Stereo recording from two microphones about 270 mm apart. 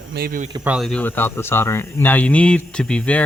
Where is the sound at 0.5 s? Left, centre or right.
Centre.